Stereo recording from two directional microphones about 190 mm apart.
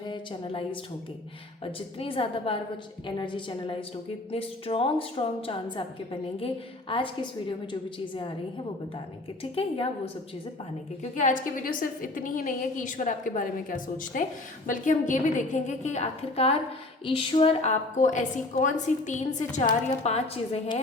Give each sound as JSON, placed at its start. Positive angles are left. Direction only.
{"t": 0.1, "sound": "a woman's voice", "side_deg": 30}
{"t": 9.4, "sound": "a woman's voice", "side_deg": 30}
{"t": 11.0, "sound": "a woman's voice", "side_deg": 40}